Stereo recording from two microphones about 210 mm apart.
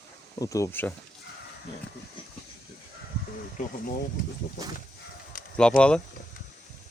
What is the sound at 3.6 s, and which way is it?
Speech, 45° left (ahead or behind).